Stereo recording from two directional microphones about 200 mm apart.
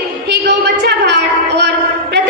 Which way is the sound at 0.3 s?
55° right (ahead or behind).